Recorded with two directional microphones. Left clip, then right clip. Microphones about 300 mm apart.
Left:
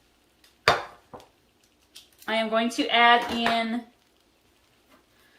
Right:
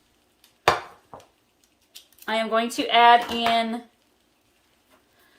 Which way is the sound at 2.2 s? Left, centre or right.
Right.